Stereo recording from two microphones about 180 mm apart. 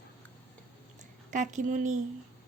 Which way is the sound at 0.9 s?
45° right (ahead or behind).